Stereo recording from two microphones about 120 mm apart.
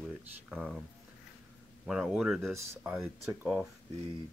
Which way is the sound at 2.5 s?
20° right (ahead or behind).